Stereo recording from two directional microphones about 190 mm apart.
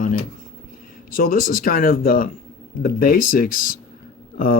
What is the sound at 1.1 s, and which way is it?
Speech, 50° left (ahead or behind).